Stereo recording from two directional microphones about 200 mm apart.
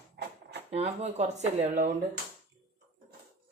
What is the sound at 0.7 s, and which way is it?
Speech, 35° right (ahead or behind).